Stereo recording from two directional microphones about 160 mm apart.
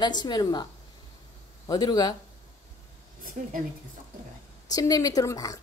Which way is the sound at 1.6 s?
25° left (ahead or behind).